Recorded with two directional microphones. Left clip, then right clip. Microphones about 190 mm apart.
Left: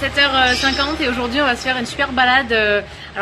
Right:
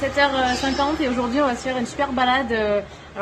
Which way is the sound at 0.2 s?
20° right (ahead or behind).